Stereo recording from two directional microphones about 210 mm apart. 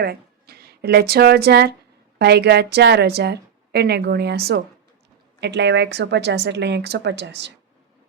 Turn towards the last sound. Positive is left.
turn(degrees=-55)  # may be behind; listen again after turning